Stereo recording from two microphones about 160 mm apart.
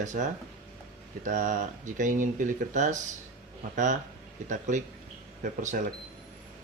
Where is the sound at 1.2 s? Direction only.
55° right (ahead or behind).